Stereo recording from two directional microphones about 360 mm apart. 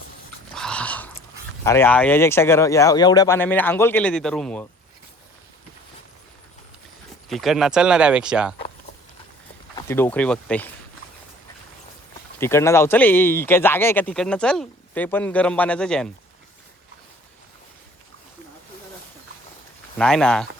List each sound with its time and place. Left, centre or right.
0.5 s a sound: centre
1.6 s speech: centre
7.3 s speech: centre
9.7 s speech: centre
12.4 s speech: centre
20.0 s speech: centre